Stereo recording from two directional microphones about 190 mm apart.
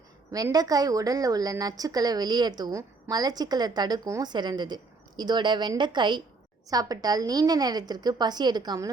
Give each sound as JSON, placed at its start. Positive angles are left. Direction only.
{"t": 0.3, "sound": "a woman's voice", "side_deg": -20}